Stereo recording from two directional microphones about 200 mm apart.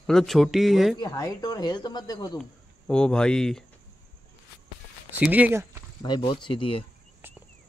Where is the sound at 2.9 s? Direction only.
5° left (ahead or behind).